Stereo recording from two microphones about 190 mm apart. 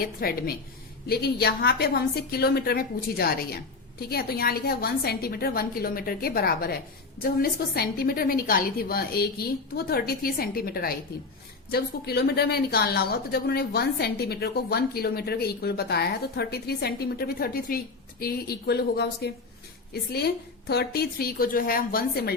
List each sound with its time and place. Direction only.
0.0 s a woman's voice: 50° left (ahead or behind)